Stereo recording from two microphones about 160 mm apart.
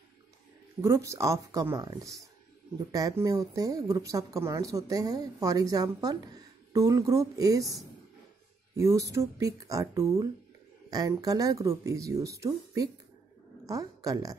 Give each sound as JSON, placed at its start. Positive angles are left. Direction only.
{"t": 0.7, "sound": "a woman's voice", "side_deg": -20}